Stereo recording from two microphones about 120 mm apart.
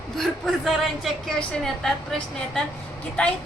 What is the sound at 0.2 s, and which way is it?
A woman's voice, centre (ahead or behind).